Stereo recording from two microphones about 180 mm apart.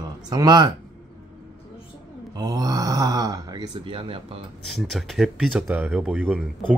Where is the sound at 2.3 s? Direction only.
20° right (ahead or behind).